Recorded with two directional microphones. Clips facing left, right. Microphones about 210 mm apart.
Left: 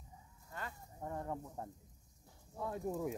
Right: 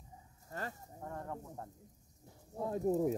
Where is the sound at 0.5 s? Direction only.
40° right (ahead or behind).